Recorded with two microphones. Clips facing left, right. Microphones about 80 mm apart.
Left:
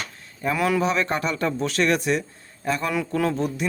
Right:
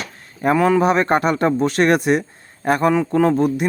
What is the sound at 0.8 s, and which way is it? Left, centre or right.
Speech, right.